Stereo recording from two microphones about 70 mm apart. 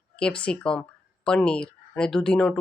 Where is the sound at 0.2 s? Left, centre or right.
Centre.